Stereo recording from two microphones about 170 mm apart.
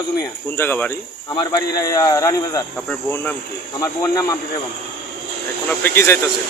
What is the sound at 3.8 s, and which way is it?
Speech, 20° left (ahead or behind).